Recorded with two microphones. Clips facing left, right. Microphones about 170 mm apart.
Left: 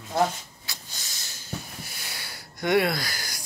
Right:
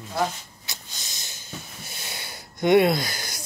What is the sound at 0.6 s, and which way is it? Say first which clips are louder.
Snort: right 1 dB; 20° right (ahead or behind).